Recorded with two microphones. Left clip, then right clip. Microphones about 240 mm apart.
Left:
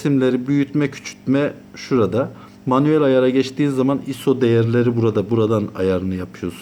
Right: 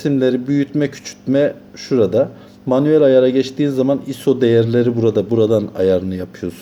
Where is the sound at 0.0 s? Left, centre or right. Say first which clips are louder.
Right 2 dB; centre.